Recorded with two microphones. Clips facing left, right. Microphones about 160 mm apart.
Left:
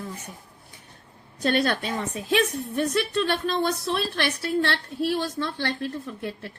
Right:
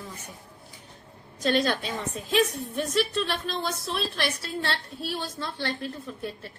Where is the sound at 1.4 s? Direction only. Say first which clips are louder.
Left 1 dB; 60° left (ahead or behind).